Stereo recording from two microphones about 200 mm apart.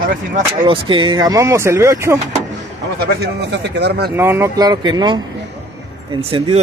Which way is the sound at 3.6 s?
55° right (ahead or behind).